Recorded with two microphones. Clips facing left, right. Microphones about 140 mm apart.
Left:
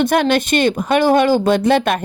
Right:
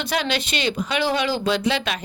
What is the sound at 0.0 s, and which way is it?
A woman's voice, 50° left (ahead or behind).